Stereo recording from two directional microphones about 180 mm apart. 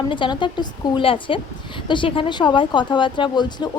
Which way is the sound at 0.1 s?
25° left (ahead or behind).